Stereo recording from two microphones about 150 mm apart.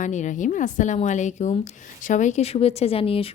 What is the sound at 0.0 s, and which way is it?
A woman's voice, 55° left (ahead or behind).